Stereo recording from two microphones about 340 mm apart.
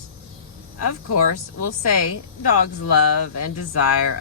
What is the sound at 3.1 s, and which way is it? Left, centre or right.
Speech, left.